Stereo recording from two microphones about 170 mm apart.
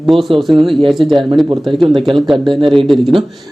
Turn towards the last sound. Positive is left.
turn(degrees=0)  # may be behind; listen again after turning